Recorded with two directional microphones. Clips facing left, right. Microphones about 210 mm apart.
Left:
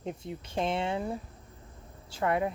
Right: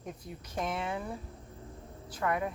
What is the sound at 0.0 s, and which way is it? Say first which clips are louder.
Speech: left 6 dB; 25° left (ahead or behind).